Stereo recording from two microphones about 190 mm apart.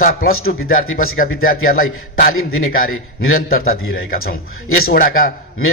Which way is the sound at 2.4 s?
90° left.